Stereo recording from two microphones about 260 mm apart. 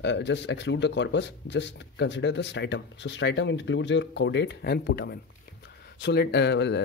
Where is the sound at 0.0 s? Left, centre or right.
Left.